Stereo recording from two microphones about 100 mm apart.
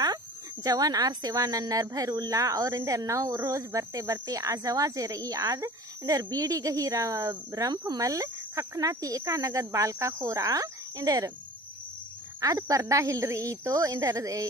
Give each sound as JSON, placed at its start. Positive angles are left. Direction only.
{"t": 0.7, "sound": "speech", "side_deg": -40}
{"t": 12.4, "sound": "speech", "side_deg": -35}